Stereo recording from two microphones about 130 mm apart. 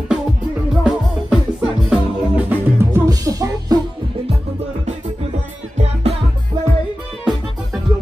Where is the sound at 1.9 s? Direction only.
10° right (ahead or behind).